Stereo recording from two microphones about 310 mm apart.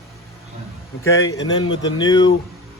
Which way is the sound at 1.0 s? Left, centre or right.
Centre.